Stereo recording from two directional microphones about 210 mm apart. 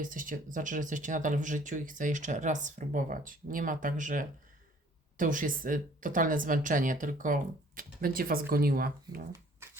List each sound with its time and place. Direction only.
0.0 s speech: 40° right (ahead or behind)